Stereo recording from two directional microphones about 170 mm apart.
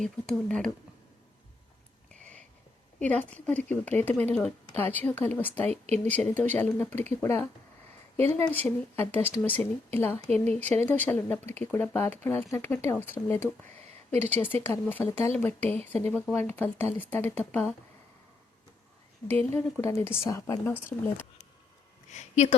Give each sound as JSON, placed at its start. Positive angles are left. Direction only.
{"t": 0.0, "sound": "speech", "side_deg": 5}
{"t": 3.0, "sound": "speech", "side_deg": 10}
{"t": 5.7, "sound": "speech", "side_deg": -40}
{"t": 6.1, "sound": "speech", "side_deg": 10}
{"t": 19.3, "sound": "speech", "side_deg": 10}
{"t": 22.1, "sound": "speech", "side_deg": 40}